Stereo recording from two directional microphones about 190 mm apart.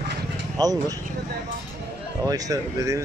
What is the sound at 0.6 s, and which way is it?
Speech, 20° right (ahead or behind).